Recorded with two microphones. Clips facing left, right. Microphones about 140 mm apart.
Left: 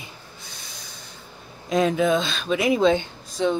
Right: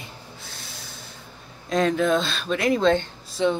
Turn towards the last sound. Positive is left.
turn(degrees=0)  # may be behind; listen again after turning